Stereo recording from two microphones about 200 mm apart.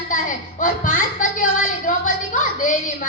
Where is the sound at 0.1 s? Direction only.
40° left (ahead or behind).